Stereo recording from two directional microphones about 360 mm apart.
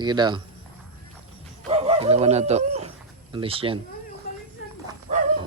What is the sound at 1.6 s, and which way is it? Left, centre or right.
Bird, centre.